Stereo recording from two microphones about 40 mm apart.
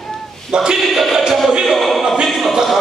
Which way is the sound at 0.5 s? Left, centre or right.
Centre.